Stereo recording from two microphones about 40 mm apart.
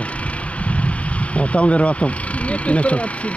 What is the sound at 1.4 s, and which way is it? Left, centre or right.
Speech, left.